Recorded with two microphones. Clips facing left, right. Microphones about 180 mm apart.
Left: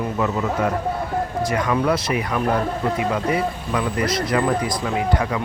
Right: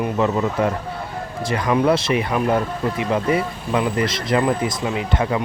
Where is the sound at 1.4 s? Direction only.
30° right (ahead or behind).